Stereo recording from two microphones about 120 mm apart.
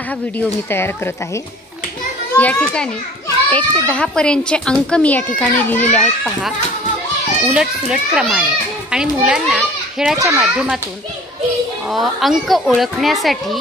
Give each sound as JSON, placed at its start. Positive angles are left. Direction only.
{"t": 0.4, "sound": "speech", "side_deg": 20}
{"t": 2.3, "sound": "speech", "side_deg": 10}
{"t": 7.5, "sound": "a child's voice", "side_deg": -5}
{"t": 10.1, "sound": "a child's voice", "side_deg": -25}
{"t": 10.4, "sound": "speech", "side_deg": -5}
{"t": 11.9, "sound": "speech", "side_deg": 0}